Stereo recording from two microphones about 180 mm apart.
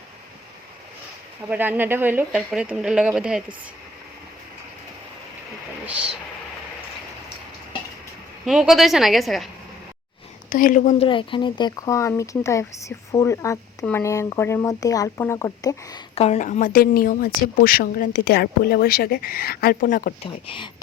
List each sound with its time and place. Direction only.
1.5 s speech: 10° right (ahead or behind)
5.8 s speech: 5° right (ahead or behind)
8.4 s speech: centre (ahead or behind)
10.5 s speech: 45° left (ahead or behind)
11.0 s speech: 30° left (ahead or behind)
16.1 s speech: 35° left (ahead or behind); by 20.1 s 50° left (ahead or behind)
20.2 s speech: 30° left (ahead or behind)